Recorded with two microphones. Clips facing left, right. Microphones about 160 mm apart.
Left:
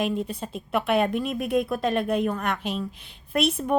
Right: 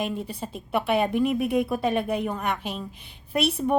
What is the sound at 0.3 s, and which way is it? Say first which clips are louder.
A woman's voice: left 1 dB; 10° right (ahead or behind).